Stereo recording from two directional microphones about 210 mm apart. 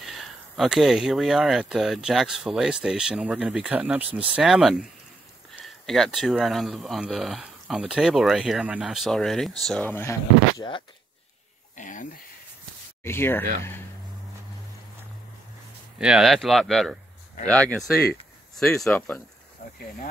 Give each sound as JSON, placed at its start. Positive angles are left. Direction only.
{"t": 0.6, "sound": "speech", "side_deg": 0}
{"t": 11.7, "sound": "speech", "side_deg": 35}
{"t": 13.0, "sound": "speech", "side_deg": 10}
{"t": 16.0, "sound": "speech", "side_deg": -5}